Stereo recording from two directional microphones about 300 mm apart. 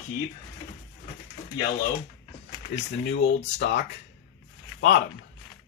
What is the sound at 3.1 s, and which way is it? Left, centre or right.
Speech, left.